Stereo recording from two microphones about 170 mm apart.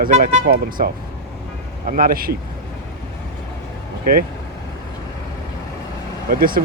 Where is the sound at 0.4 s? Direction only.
60° right (ahead or behind).